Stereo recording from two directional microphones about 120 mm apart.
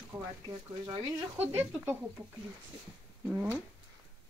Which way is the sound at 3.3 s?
15° right (ahead or behind).